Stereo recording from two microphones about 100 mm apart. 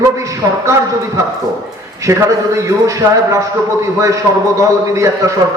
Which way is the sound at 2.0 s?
30° right (ahead or behind).